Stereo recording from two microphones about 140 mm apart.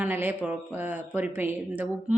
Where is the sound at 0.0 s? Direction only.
15° right (ahead or behind).